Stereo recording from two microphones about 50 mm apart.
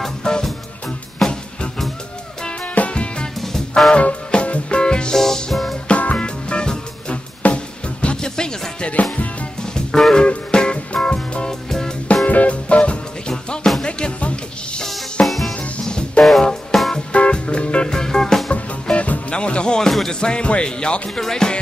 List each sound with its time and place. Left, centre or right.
0.0 s music: centre
2.4 s music: left
3.3 s music: centre
3.9 s music: left; by 5.8 s centre
5.9 s music: left
9.1 s music: left; by 12.3 s centre
12.3 s music: left
15.2 s drum kit: centre
15.8 s music: centre
17.1 s music: left
18.5 s music: left